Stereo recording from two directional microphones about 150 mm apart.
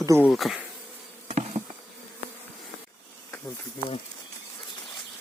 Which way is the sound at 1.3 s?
50° right (ahead or behind).